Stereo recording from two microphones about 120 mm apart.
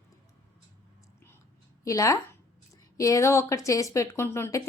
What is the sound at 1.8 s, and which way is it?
A woman's voice, 30° left (ahead or behind).